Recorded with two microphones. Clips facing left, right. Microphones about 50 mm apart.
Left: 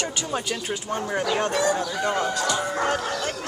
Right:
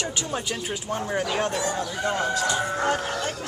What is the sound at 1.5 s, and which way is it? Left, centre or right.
Speech, left.